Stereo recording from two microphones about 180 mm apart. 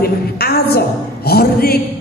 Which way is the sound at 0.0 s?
60° left (ahead or behind).